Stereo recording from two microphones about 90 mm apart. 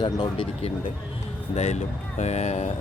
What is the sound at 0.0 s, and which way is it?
Speech, 65° left (ahead or behind).